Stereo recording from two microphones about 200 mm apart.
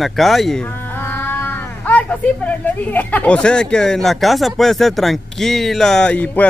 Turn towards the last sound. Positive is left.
turn(degrees=5)  # may be behind; listen again after turning